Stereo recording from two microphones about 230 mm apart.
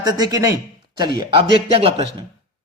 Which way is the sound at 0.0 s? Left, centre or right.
Centre.